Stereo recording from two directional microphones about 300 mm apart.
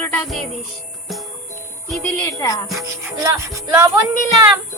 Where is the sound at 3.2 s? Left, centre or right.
Centre.